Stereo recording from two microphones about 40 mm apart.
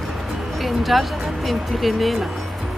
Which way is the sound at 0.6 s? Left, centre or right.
Centre.